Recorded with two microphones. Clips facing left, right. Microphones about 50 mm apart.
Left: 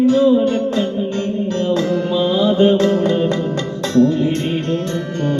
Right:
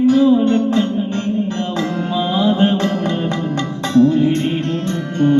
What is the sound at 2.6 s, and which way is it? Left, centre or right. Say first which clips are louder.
Music: left 3 dB; right.